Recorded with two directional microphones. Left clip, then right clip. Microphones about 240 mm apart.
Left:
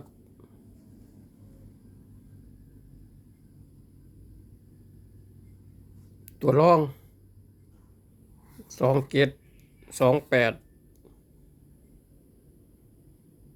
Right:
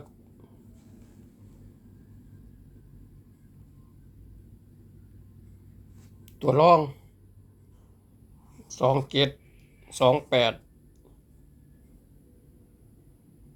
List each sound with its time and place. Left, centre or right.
6.4 s speech: centre
8.8 s speech: left
9.0 s speech: left
10.0 s speech: left
10.2 s speech: left